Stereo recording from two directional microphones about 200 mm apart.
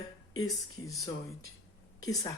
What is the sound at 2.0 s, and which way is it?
Speech, 20° left (ahead or behind).